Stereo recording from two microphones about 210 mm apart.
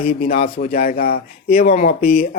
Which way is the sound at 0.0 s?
30° left (ahead or behind).